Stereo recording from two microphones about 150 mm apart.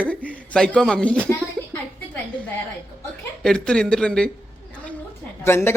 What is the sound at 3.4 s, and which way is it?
Speech, 5° left (ahead or behind).